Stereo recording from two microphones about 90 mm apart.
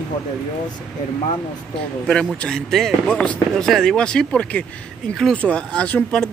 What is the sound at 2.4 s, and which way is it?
Speech, 5° left (ahead or behind).